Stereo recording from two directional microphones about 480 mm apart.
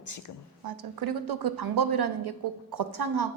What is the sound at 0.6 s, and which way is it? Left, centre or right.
A woman's voice, right.